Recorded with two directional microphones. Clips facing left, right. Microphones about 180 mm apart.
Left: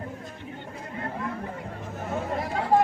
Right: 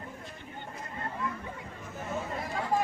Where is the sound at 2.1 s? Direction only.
70° left (ahead or behind).